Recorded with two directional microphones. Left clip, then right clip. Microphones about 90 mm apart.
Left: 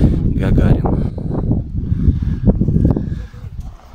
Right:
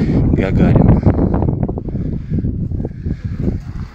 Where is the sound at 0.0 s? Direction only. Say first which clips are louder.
Right 3 dB; 20° left (ahead or behind).